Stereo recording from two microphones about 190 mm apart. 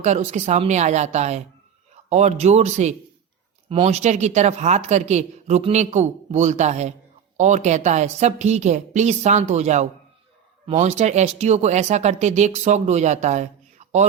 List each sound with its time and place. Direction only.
0.0 s speech: 40° right (ahead or behind)